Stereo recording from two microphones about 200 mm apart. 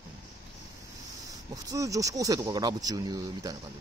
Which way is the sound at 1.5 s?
15° right (ahead or behind).